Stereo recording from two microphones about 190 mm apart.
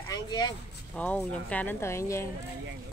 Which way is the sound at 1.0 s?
5° left (ahead or behind).